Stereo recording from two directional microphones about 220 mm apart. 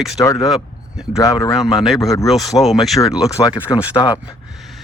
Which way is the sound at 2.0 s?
15° left (ahead or behind).